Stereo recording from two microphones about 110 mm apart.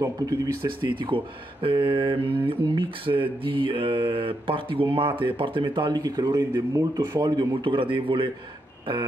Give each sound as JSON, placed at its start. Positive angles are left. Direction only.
{"t": 0.0, "sound": "speech", "side_deg": -30}
{"t": 0.8, "sound": "speech", "side_deg": -50}